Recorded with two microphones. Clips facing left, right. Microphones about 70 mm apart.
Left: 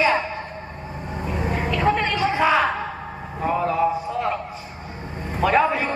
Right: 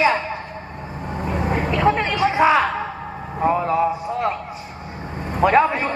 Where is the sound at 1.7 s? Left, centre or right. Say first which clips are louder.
Right 2 dB; centre.